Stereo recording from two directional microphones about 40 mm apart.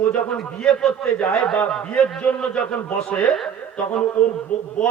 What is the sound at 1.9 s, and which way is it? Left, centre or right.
A man's voice, left.